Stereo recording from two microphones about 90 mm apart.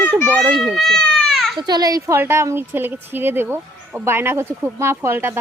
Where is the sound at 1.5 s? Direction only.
50° right (ahead or behind); by 5.4 s 25° right (ahead or behind).